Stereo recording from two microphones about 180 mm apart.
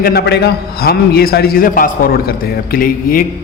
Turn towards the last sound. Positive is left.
turn(degrees=50)  # may be behind; listen again after turning